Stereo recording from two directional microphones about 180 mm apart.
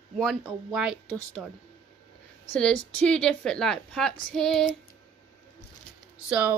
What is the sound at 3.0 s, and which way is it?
A woman's voice, 5° left (ahead or behind).